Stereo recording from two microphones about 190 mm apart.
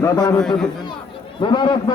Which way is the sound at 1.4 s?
25° left (ahead or behind).